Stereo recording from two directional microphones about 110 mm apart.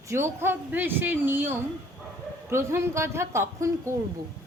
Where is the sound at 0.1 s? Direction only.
25° right (ahead or behind).